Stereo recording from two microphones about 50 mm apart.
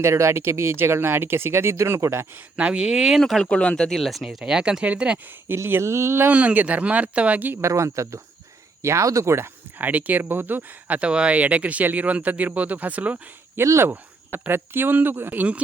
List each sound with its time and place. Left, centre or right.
0.0 s speech: right
2.6 s speech: right
3.2 s speech: centre
3.4 s speech: left
3.8 s speech: centre; by 5.2 s right
5.5 s speech: right
5.8 s speech: right
6.3 s speech: right
7.6 s speech: right
9.7 s speech: right
13.6 s speech: right
15.3 s speech: right